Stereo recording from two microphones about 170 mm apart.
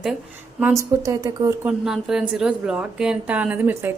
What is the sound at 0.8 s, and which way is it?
Speech, 20° right (ahead or behind).